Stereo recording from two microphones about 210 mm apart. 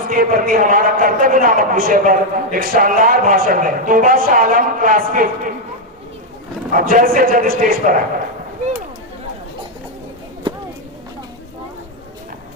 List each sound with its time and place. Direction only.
0.1 s a man's voice: 40° right (ahead or behind)
6.7 s a man's voice: 40° right (ahead or behind)